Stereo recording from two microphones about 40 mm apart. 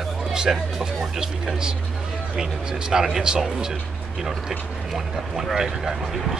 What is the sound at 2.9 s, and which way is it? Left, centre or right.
Speech, centre.